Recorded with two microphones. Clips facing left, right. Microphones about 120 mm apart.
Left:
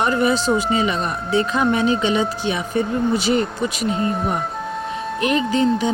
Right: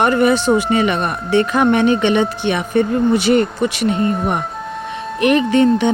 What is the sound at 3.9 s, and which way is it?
Speech, 5° left (ahead or behind).